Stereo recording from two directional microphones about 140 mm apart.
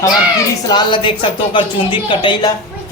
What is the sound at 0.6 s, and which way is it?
Speech, 35° left (ahead or behind).